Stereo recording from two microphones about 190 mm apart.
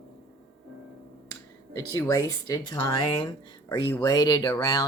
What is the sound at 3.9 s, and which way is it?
Speech, 20° left (ahead or behind).